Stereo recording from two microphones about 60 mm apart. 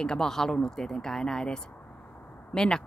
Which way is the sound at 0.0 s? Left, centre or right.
Centre.